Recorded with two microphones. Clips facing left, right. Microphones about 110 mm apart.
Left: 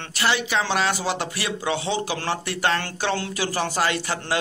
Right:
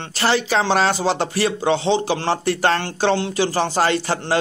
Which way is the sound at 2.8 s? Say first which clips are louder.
Right 7 dB; 25° right (ahead or behind).